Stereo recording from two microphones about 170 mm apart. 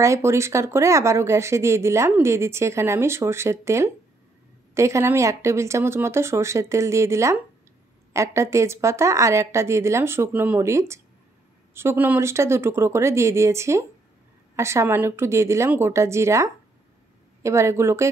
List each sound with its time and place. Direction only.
0.0 s speech: 15° right (ahead or behind)